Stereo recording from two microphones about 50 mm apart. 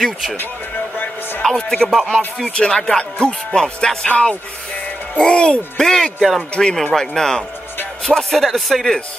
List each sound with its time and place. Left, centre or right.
0.0 s speech: centre
1.4 s music: centre
2.4 s speech: left
2.9 s music: centre
4.1 s speech: left
5.9 s music: centre